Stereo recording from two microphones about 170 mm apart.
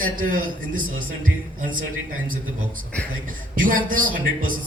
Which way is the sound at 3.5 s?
50° right (ahead or behind).